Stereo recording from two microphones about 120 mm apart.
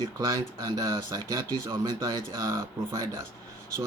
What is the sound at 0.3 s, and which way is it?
Speech, 25° right (ahead or behind).